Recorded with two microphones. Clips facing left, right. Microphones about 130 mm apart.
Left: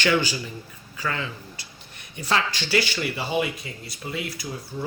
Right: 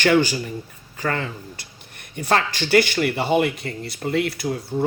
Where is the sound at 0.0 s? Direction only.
50° right (ahead or behind).